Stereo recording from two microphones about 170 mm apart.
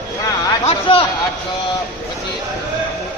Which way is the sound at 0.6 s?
35° left (ahead or behind).